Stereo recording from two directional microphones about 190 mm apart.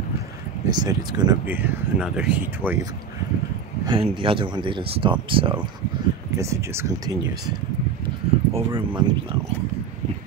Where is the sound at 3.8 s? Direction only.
25° right (ahead or behind).